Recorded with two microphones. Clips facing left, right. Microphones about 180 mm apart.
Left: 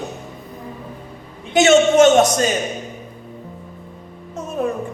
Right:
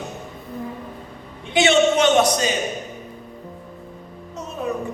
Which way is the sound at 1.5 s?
45° left (ahead or behind).